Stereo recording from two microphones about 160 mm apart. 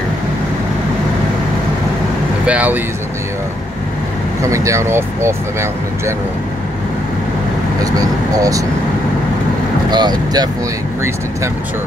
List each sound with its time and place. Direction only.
2.4 s speech: 10° right (ahead or behind)
4.4 s speech: 20° right (ahead or behind)
7.8 s speech: 20° right (ahead or behind)
9.8 s speech: 25° right (ahead or behind)